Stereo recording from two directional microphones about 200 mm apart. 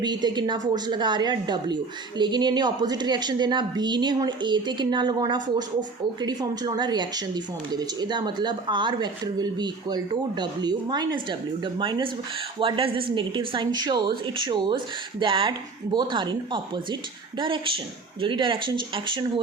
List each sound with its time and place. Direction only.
0.0 s a woman's voice: 20° right (ahead or behind)
18.2 s a woman's voice: 25° right (ahead or behind)